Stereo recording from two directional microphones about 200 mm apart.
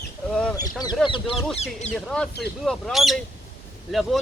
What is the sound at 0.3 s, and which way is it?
Bird, 5° left (ahead or behind).